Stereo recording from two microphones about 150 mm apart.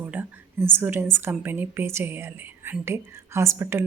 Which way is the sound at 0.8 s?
15° right (ahead or behind).